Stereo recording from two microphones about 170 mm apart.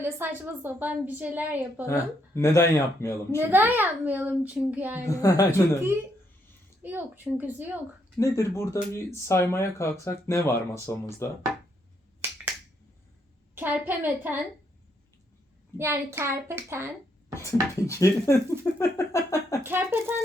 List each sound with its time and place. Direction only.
0.0 s a woman's voice: 10° right (ahead or behind)
1.9 s speech: 15° left (ahead or behind)
3.4 s a woman's voice: 10° right (ahead or behind)
5.0 s a woman's voice: 20° left (ahead or behind)
6.8 s a woman's voice: 10° right (ahead or behind)
8.2 s speech: 15° left (ahead or behind)
13.6 s a woman's voice: 10° right (ahead or behind)
15.8 s a woman's voice: 15° right (ahead or behind)
17.3 s speech: 15° left (ahead or behind)
19.6 s a woman's voice: 15° right (ahead or behind)